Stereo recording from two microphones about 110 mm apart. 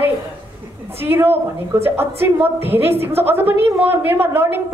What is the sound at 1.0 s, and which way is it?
A woman's voice, 20° right (ahead or behind).